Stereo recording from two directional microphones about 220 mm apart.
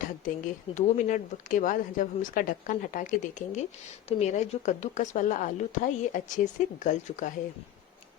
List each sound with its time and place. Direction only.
0.0 s speech: 35° left (ahead or behind)